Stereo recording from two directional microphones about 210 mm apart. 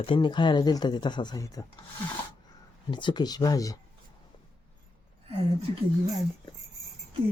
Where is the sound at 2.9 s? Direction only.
20° left (ahead or behind).